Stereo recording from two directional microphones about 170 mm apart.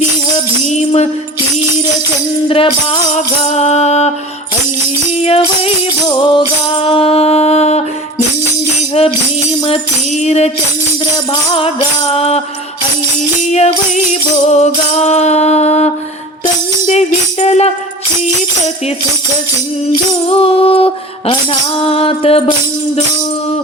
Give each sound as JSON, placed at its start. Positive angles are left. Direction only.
{"t": 0.7, "sound": "tambourine", "side_deg": 40}
{"t": 3.5, "sound": "music", "side_deg": 40}
{"t": 5.2, "sound": "music", "side_deg": 35}
{"t": 9.0, "sound": "music", "side_deg": 35}
{"t": 11.5, "sound": "music", "side_deg": 35}
{"t": 13.5, "sound": "music", "side_deg": 40}
{"t": 17.4, "sound": "music", "side_deg": 40}
{"t": 20.3, "sound": "female singing", "side_deg": 35}
{"t": 21.8, "sound": "music", "side_deg": 35}